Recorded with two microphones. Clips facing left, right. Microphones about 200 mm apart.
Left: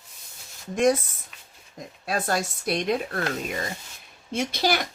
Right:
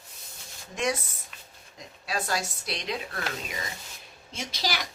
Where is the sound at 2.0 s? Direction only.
50° left (ahead or behind).